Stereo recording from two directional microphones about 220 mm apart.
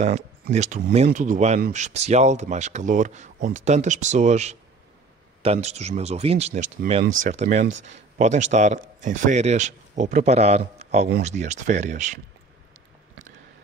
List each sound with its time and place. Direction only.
0.0 s speech: 30° right (ahead or behind)